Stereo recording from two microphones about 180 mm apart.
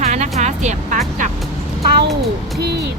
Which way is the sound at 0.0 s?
40° right (ahead or behind).